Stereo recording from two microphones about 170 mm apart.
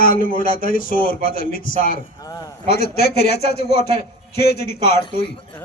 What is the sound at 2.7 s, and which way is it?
A man's voice, 65° left (ahead or behind).